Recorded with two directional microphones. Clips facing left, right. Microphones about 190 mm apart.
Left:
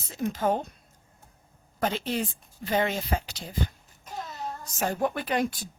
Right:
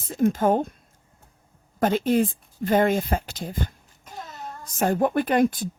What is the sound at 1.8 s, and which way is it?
A child's voice, 50° right (ahead or behind).